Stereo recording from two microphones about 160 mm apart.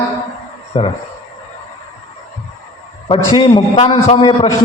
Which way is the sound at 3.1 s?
30° left (ahead or behind).